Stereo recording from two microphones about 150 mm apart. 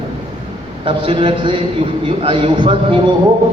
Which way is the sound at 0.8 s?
35° right (ahead or behind).